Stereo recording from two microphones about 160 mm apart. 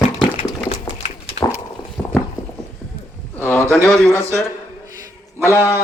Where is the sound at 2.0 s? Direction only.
15° left (ahead or behind).